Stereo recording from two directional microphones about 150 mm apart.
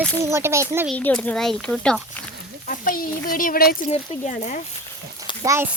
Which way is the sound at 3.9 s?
50° left (ahead or behind).